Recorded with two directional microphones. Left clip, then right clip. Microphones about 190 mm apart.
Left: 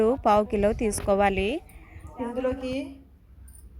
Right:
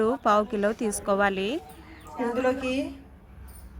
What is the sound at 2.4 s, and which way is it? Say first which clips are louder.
Speech: right 2 dB; 5° left (ahead or behind).